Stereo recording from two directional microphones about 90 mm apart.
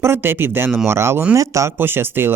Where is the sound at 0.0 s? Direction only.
25° right (ahead or behind).